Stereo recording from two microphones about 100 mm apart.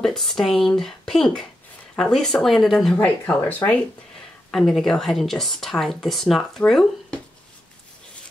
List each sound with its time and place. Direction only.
0.0 s speech: 5° left (ahead or behind)
3.0 s speech: 20° left (ahead or behind)
4.5 s speech: centre (ahead or behind)